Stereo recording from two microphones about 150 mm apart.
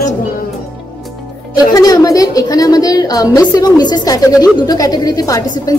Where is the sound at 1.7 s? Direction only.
25° left (ahead or behind).